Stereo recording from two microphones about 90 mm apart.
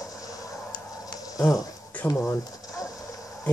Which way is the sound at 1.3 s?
40° left (ahead or behind).